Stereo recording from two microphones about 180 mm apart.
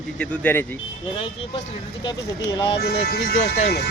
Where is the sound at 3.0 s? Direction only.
65° left (ahead or behind).